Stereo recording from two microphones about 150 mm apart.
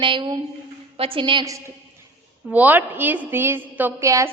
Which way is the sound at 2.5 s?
10° right (ahead or behind).